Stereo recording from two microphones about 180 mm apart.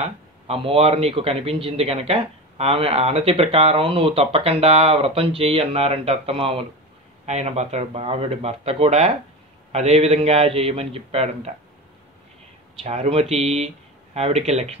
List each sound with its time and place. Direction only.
0.0 s a man's voice: 35° right (ahead or behind)
12.8 s a man's voice: 35° right (ahead or behind)